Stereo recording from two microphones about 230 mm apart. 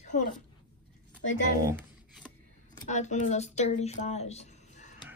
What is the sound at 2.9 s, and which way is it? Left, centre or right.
Speech, left.